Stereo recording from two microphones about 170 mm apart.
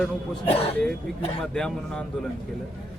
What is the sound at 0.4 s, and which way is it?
Speech, 35° left (ahead or behind).